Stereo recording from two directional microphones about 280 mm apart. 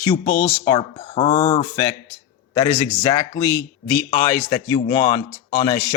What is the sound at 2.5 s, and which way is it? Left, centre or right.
Speech, centre.